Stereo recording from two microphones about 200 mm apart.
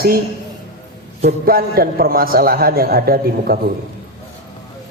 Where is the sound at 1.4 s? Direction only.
50° right (ahead or behind).